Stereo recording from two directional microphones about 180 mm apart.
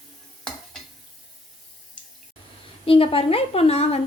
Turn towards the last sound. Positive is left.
turn(degrees=35)  # may be behind; listen again after turning